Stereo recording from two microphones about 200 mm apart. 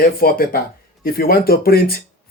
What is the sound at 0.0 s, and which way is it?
Speech, 45° left (ahead or behind).